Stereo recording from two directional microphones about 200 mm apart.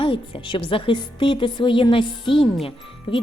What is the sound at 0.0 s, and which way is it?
Speech, 25° left (ahead or behind).